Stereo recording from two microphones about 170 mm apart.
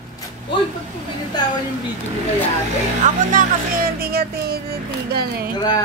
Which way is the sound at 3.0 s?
55° right (ahead or behind).